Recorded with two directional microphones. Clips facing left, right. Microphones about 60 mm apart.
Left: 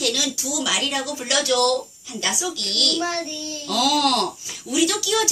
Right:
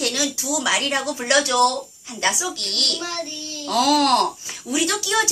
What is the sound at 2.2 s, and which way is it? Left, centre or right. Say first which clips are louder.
A woman's voice: right 3 dB; right.